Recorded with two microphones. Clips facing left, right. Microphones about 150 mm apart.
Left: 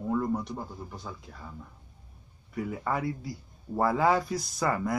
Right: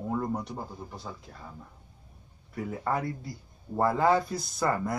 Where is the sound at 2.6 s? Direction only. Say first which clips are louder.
Right 1 dB; centre (ahead or behind).